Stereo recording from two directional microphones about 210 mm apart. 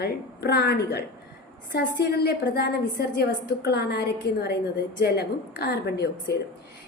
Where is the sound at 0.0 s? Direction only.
50° left (ahead or behind).